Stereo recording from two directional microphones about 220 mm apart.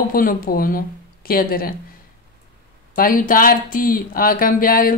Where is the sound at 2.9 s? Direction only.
40° left (ahead or behind).